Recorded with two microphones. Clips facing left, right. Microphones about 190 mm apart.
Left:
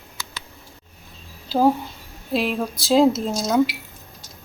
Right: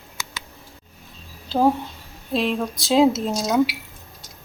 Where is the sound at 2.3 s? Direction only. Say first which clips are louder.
Even; 5° left (ahead or behind).